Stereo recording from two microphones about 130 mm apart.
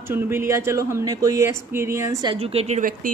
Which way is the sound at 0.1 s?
20° right (ahead or behind).